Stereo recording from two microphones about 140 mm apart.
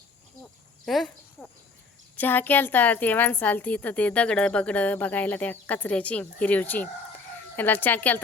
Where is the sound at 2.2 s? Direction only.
15° left (ahead or behind).